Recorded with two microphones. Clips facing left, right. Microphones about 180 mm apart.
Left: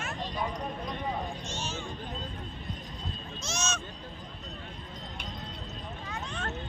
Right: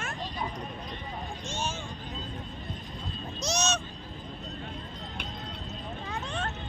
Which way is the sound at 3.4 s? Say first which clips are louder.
Right 6 dB; 35° right (ahead or behind).